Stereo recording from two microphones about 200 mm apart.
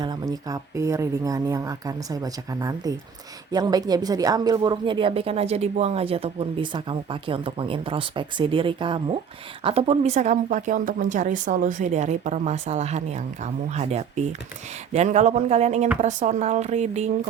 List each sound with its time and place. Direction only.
0.0 s a woman's voice: 20° right (ahead or behind)